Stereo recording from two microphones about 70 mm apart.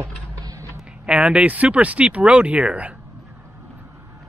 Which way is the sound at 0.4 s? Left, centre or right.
Right.